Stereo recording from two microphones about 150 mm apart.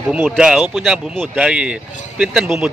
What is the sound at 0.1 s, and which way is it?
A man's voice, 5° right (ahead or behind).